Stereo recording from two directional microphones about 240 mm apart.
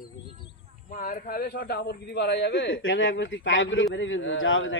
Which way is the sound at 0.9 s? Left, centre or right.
Left.